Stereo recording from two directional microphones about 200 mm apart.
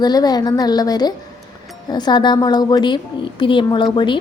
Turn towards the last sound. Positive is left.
turn(degrees=25)  # may be behind; listen again after turning